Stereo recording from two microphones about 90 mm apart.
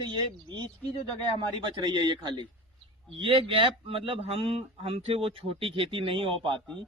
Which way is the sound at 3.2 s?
75° right (ahead or behind).